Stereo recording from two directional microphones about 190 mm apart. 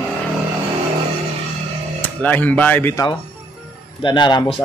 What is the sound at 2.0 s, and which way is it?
Speech, 10° left (ahead or behind).